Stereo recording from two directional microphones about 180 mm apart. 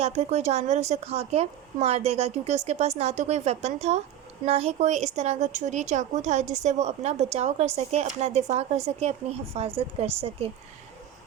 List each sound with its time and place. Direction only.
0.0 s speech: 35° right (ahead or behind)